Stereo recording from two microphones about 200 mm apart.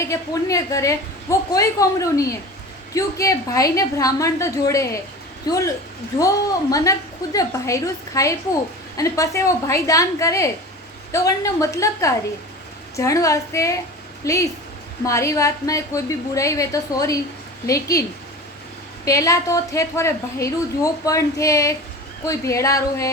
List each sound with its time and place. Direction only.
0.0 s a woman's voice: 15° left (ahead or behind)
6.1 s a woman's voice: 15° left (ahead or behind)
19.0 s a woman's voice: 15° left (ahead or behind)